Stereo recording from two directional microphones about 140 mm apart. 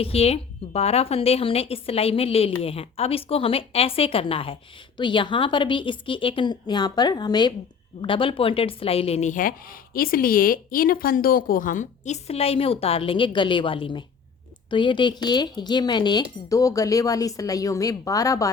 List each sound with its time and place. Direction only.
0.0 s a woman's voice: 45° left (ahead or behind)
9.3 s speech: 75° left (ahead or behind); by 18.5 s 25° left (ahead or behind)